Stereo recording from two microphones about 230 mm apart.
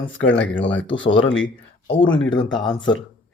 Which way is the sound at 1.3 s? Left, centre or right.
Left.